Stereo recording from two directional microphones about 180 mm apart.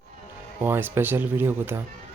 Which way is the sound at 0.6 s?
10° right (ahead or behind).